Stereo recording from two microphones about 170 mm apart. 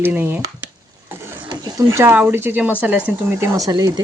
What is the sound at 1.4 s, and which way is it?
Speech, 25° right (ahead or behind).